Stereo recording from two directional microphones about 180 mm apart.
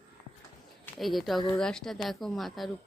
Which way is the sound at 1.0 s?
Centre (ahead or behind).